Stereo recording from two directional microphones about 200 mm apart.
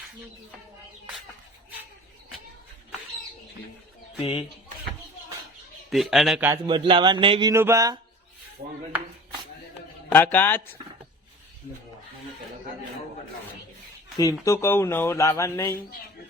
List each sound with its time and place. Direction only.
5.9 s a man's voice: centre (ahead or behind)
6.5 s speech: 25° right (ahead or behind)
7.5 s speech: 15° right (ahead or behind)
10.1 s speech: 10° left (ahead or behind)
14.2 s speech: 15° left (ahead or behind)